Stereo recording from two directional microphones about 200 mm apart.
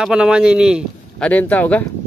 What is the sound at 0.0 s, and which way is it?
Speech, 5° right (ahead or behind).